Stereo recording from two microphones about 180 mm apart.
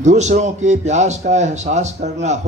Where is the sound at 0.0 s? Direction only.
40° right (ahead or behind).